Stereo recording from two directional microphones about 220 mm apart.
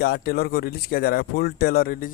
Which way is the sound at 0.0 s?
45° left (ahead or behind).